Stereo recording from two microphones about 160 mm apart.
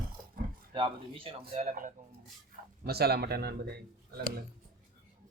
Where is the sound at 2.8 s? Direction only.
80° right.